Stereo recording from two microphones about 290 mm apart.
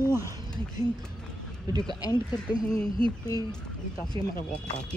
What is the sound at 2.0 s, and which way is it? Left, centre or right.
Speech, centre.